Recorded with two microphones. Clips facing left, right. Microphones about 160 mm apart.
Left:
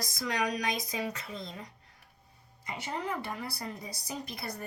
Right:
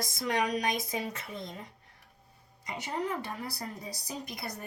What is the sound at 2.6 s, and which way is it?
Speech, 20° right (ahead or behind).